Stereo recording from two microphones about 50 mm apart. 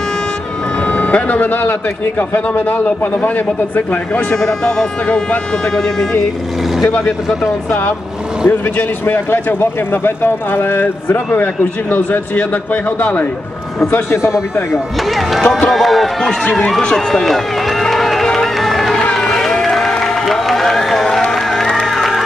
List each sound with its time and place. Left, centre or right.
0.8 s a man's voice: left
4.3 s speech: centre
5.0 s speech: left
6.8 s a man's voice: left
8.5 s a man's voice: left
14.1 s speech: left
15.0 s speech: centre
16.9 s run: centre
19.1 s a sound: centre
19.6 s music: centre